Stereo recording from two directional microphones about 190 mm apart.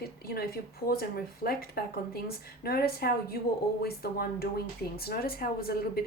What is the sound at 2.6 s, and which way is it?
A woman's voice, 55° left (ahead or behind).